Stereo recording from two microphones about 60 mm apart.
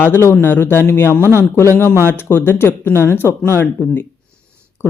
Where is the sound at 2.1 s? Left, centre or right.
Left.